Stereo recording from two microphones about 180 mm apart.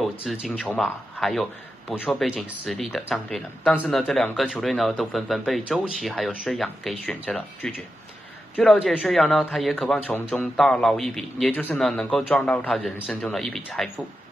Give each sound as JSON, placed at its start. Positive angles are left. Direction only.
{"t": 0.0, "sound": "speech", "side_deg": 0}
{"t": 8.9, "sound": "speech", "side_deg": 0}